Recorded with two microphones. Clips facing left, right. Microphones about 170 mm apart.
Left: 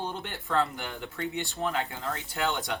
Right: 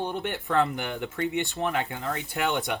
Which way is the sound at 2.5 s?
20° right (ahead or behind).